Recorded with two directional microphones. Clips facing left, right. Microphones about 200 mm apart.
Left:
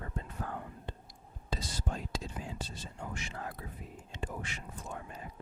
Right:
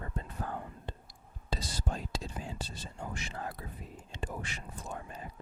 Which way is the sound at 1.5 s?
35° right (ahead or behind).